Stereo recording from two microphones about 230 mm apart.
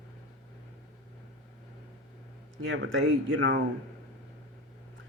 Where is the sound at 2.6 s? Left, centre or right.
Right.